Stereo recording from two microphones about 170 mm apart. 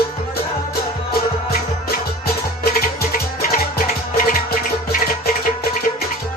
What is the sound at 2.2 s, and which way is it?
Music, 60° left (ahead or behind).